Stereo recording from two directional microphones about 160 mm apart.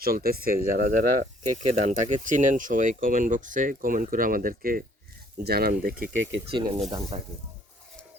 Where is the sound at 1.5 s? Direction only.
50° right (ahead or behind).